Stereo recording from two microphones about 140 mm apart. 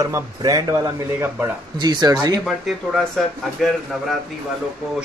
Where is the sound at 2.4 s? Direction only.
Centre (ahead or behind).